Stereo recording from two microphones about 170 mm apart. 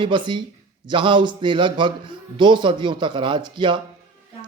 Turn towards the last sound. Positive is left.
turn(degrees=-25)  # may be behind; listen again after turning